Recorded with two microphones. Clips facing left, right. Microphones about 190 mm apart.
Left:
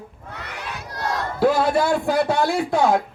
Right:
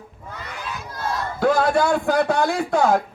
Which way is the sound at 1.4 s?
5° left (ahead or behind).